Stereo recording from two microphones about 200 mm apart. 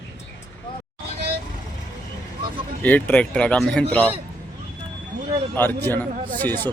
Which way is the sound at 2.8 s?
10° left (ahead or behind).